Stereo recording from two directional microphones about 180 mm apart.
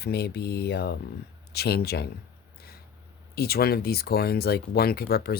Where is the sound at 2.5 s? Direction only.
60° left (ahead or behind).